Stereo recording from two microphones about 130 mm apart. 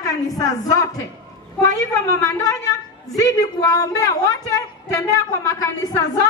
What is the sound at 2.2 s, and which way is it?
A woman's voice, 25° left (ahead or behind).